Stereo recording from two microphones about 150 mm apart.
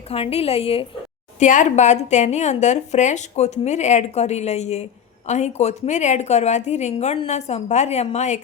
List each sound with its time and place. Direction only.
0.1 s a woman's voice: 40° left (ahead or behind)
1.4 s a woman's voice: 55° left (ahead or behind)